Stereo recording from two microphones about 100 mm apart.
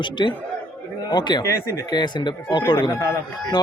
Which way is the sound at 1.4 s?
30° left (ahead or behind).